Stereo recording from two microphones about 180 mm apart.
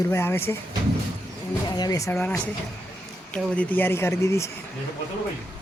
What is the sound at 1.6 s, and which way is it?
Speech, 20° left (ahead or behind).